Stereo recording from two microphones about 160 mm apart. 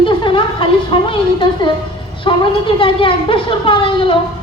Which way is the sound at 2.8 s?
35° left (ahead or behind).